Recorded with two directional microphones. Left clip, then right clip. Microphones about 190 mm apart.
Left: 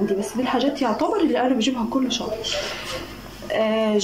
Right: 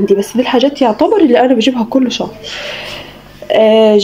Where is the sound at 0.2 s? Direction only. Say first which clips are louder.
Right 11 dB; 50° right (ahead or behind).